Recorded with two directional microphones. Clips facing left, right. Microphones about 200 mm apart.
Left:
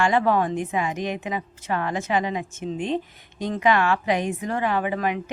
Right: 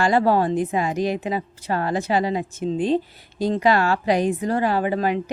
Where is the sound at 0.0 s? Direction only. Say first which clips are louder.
Right 2 dB; 35° right (ahead or behind).